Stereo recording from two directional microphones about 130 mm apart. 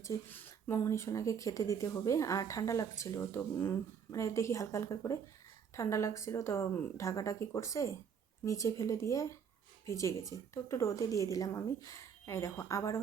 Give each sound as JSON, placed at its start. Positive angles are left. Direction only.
{"t": 0.0, "sound": "speech", "side_deg": 20}